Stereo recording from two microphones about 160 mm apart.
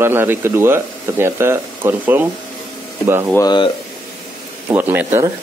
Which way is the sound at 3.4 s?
25° left (ahead or behind).